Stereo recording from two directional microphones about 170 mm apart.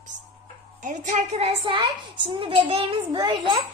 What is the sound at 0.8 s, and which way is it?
A woman's voice, 45° right (ahead or behind).